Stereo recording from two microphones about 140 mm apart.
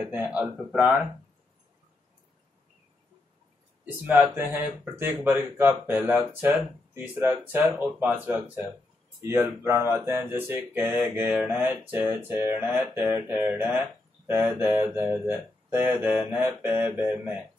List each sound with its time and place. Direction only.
0.0 s speech: 10° right (ahead or behind)
4.2 s speech: 15° right (ahead or behind)